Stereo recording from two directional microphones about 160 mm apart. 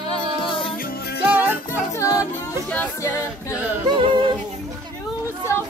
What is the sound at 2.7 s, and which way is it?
A capella, 15° left (ahead or behind).